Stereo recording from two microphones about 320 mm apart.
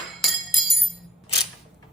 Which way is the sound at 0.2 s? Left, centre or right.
Centre.